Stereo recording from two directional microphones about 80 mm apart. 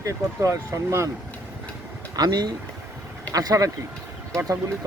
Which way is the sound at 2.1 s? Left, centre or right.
Right.